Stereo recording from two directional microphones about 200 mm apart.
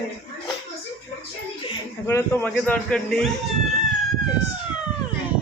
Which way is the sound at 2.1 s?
10° left (ahead or behind).